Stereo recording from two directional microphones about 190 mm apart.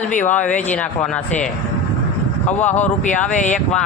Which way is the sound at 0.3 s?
5° left (ahead or behind).